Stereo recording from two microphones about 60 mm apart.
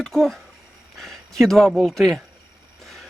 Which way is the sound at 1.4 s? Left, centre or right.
Centre.